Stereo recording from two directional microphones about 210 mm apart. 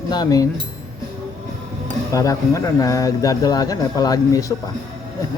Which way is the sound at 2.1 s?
15° left (ahead or behind).